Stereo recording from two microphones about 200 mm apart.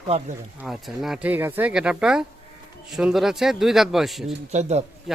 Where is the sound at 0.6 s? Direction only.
Centre (ahead or behind).